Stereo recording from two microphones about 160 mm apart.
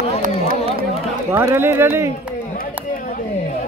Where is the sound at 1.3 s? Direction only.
15° right (ahead or behind).